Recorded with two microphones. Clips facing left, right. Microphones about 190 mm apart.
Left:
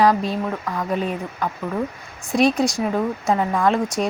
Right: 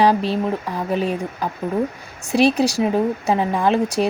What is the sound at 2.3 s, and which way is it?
Speech, 70° right (ahead or behind).